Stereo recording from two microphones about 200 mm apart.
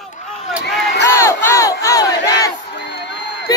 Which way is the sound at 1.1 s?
15° left (ahead or behind).